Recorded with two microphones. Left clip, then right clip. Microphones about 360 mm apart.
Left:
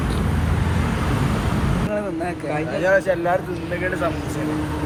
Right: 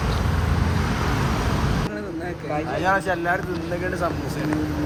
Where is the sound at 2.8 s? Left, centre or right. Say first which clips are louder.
Left 4 dB; centre.